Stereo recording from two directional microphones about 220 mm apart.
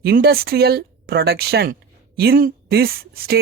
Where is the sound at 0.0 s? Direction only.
45° right (ahead or behind).